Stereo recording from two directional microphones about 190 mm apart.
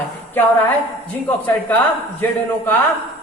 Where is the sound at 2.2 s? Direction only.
10° left (ahead or behind).